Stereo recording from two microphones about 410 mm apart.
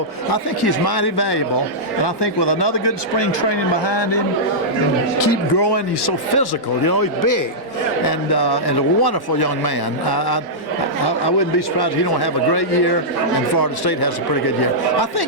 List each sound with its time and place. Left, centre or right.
0.3 s speech: left
3.8 s speech: left
5.2 s speech: left
8.0 s speech: left